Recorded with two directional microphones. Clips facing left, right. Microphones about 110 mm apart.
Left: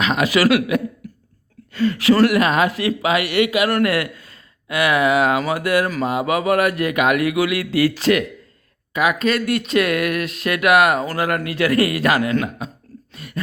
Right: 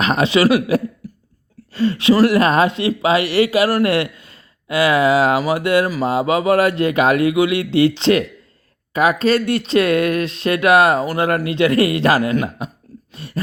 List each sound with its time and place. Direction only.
0.2 s speech: 25° right (ahead or behind)
8.9 s speech: 35° right (ahead or behind)
12.3 s a man's voice: 15° right (ahead or behind)
13.1 s a sound: 30° right (ahead or behind)